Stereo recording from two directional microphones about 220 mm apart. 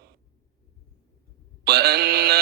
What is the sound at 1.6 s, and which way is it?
Speech, 45° right (ahead or behind).